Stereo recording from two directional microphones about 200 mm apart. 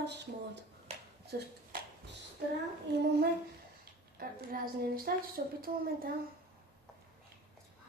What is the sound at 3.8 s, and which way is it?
A woman's voice, 50° right (ahead or behind).